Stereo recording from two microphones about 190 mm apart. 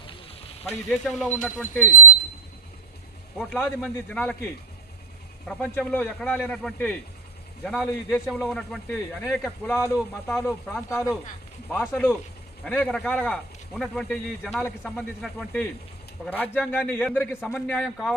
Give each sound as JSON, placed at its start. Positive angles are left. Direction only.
{"t": 0.9, "sound": "a man's voice", "side_deg": 0}
{"t": 3.3, "sound": "a man's voice", "side_deg": 0}
{"t": 5.5, "sound": "a man's voice", "side_deg": 5}
{"t": 9.7, "sound": "a man's voice", "side_deg": 15}